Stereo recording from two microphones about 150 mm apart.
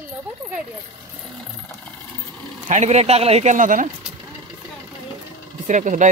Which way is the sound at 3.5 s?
60° right (ahead or behind).